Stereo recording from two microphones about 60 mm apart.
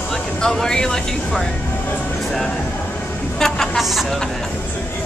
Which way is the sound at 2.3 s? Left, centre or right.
Centre.